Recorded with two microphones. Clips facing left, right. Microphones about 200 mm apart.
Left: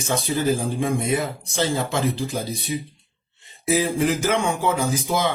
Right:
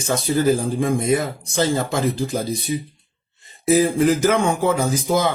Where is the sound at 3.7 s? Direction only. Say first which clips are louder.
Right 5 dB; 50° right (ahead or behind).